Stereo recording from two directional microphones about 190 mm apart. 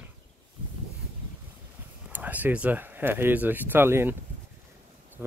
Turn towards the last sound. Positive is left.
turn(degrees=-10)  # may be behind; listen again after turning